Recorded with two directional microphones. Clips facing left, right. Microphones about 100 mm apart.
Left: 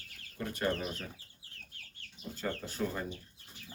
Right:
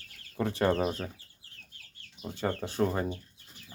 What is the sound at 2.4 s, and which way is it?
Speech, 40° right (ahead or behind).